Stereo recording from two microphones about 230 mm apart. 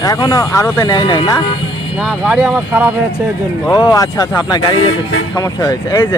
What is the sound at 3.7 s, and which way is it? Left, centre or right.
Speech, centre.